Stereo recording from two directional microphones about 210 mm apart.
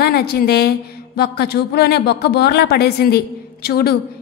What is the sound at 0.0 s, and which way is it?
A woman's voice, 50° left (ahead or behind).